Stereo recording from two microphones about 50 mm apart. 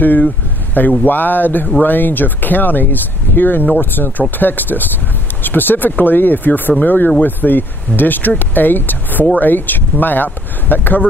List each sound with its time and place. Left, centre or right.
0.0 s speech: left